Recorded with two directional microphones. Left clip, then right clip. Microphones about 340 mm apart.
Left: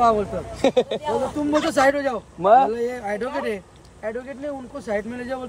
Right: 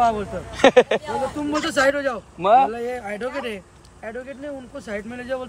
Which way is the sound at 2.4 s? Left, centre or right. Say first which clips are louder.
Left 1 dB; centre.